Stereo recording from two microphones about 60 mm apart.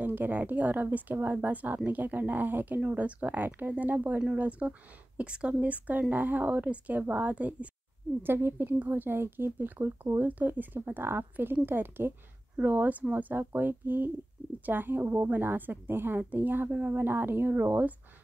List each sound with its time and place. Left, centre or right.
0.0 s speech: right
8.2 s speech: right